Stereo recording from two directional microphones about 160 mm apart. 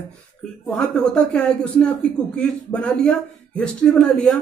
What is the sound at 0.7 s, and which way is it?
A man's voice, 5° left (ahead or behind).